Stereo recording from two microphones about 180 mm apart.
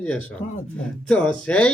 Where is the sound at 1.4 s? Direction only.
5° left (ahead or behind).